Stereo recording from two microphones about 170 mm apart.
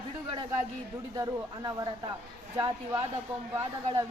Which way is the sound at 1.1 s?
20° right (ahead or behind).